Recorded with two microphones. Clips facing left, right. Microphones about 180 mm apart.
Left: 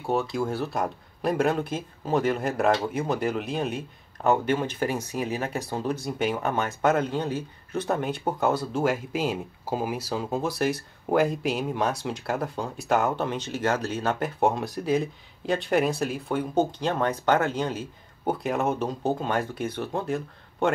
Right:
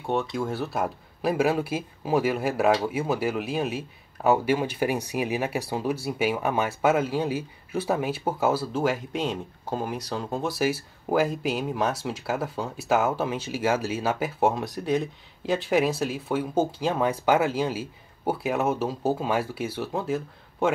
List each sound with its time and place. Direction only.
0.0 s speech: centre (ahead or behind)